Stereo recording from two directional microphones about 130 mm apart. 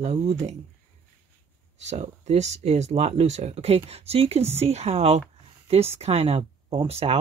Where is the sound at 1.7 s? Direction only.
60° right (ahead or behind).